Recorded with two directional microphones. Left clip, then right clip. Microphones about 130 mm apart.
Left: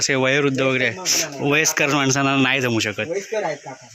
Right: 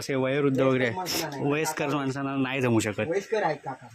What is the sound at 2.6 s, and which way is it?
Speech, 5° right (ahead or behind).